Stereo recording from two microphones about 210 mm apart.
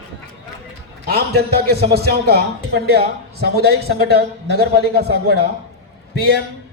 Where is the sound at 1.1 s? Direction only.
50° right (ahead or behind).